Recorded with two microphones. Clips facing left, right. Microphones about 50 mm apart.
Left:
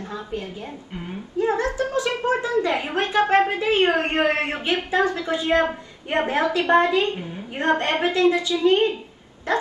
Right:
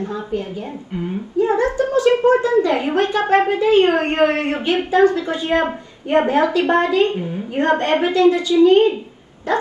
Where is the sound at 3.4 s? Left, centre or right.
Left.